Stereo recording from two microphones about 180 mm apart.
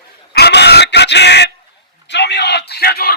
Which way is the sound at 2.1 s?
70° left (ahead or behind).